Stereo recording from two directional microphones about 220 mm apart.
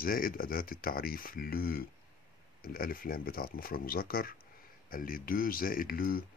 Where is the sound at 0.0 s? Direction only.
40° left (ahead or behind).